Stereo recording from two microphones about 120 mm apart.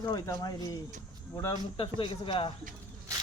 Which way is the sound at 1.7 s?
50° left (ahead or behind).